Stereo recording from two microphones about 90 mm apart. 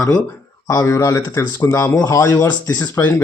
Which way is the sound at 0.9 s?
40° left (ahead or behind).